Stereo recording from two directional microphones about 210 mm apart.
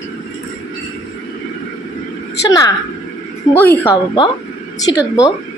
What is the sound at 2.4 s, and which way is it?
Speech, 20° left (ahead or behind).